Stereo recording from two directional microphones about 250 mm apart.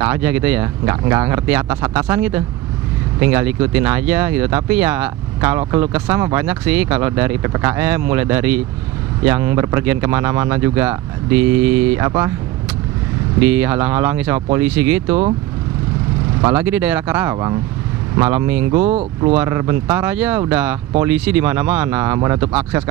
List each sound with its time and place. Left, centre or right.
0.0 s speech: centre
13.4 s speech: centre
16.5 s speech: centre
18.8 s speech: right
19.3 s speech: centre